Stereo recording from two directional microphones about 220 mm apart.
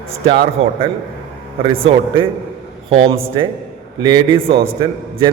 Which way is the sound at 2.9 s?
25° right (ahead or behind).